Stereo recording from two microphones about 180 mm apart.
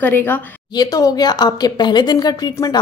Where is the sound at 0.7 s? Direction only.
20° left (ahead or behind).